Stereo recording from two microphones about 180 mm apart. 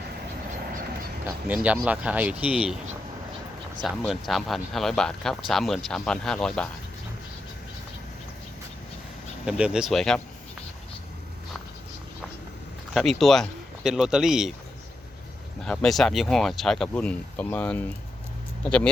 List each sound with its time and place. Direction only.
1.2 s speech: 10° right (ahead or behind)
3.8 s speech: centre (ahead or behind)
9.5 s speech: 5° right (ahead or behind)
12.9 s speech: centre (ahead or behind)
15.6 s speech: 5° left (ahead or behind)